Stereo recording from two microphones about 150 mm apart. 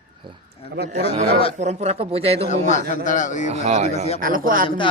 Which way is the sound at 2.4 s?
55° left (ahead or behind).